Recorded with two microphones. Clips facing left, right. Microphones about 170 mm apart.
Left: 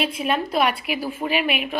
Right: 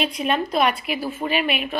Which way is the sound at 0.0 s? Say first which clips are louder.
Right 1 dB; 5° left (ahead or behind).